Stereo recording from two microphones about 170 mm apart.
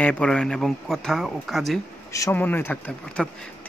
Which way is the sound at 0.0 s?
5° left (ahead or behind).